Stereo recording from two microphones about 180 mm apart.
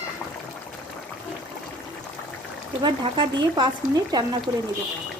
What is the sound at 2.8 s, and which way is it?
Speech, 25° right (ahead or behind).